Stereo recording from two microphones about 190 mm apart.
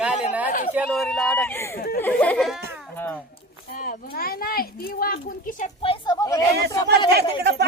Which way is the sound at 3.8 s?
50° left (ahead or behind).